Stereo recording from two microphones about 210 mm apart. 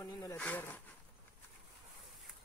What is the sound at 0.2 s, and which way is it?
Snake, 10° left (ahead or behind).